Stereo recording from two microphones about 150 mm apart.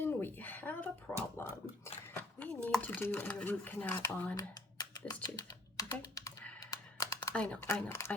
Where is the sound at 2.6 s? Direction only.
10° left (ahead or behind).